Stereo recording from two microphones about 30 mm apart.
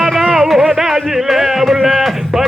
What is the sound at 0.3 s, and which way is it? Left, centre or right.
Music, centre.